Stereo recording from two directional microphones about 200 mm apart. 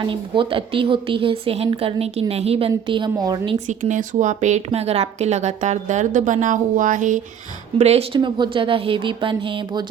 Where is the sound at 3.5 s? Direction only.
35° right (ahead or behind).